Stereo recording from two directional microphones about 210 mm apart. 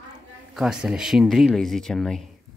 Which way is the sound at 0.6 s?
5° right (ahead or behind).